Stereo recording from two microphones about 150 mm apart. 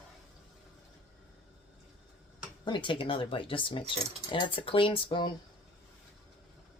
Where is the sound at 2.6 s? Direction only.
35° left (ahead or behind).